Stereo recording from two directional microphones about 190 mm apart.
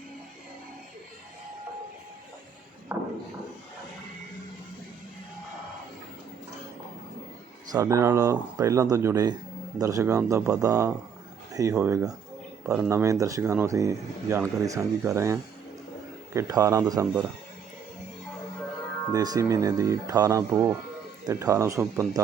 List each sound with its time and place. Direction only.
2.9 s a sound: 10° right (ahead or behind)
7.7 s speech: 15° right (ahead or behind)
19.1 s speech: 20° right (ahead or behind)